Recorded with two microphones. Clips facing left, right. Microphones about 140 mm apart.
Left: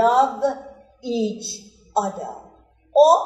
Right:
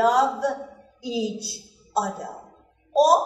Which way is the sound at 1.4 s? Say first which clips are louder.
Left 1 dB; 25° left (ahead or behind).